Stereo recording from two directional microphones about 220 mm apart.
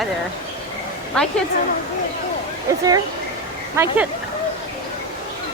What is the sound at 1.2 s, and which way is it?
Speech, 5° left (ahead or behind).